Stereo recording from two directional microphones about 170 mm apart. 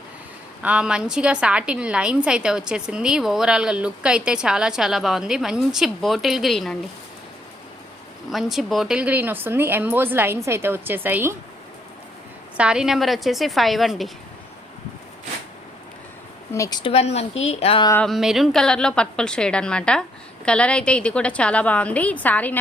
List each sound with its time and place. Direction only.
0.6 s a woman's voice: 5° right (ahead or behind)
8.3 s speech: centre (ahead or behind)
12.5 s a woman's voice: 5° right (ahead or behind)
16.5 s speech: 20° left (ahead or behind)
16.9 s speech: 40° left (ahead or behind)
18.0 s a woman's voice: centre (ahead or behind)